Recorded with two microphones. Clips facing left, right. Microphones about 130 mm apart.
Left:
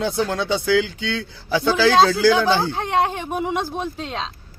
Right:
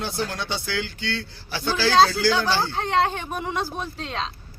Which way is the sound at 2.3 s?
20° left (ahead or behind).